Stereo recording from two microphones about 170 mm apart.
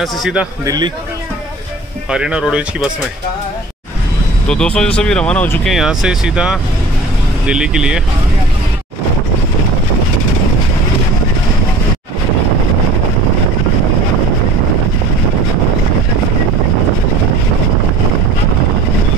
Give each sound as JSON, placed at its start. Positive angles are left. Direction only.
{"t": 0.0, "sound": "speech", "side_deg": -5}
{"t": 0.7, "sound": "speech", "side_deg": -25}
{"t": 2.0, "sound": "speech", "side_deg": -5}
{"t": 4.5, "sound": "speech", "side_deg": 5}